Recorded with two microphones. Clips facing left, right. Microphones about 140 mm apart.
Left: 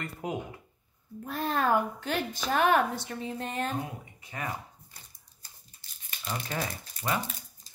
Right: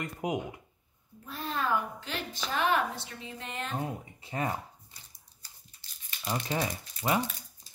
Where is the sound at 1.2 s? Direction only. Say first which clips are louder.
Left 5 dB; 55° left (ahead or behind).